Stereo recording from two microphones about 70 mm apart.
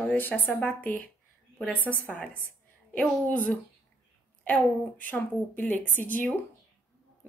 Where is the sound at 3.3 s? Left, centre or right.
Centre.